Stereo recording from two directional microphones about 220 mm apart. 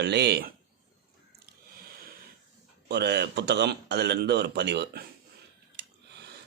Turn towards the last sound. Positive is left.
turn(degrees=-50)  # may be behind; listen again after turning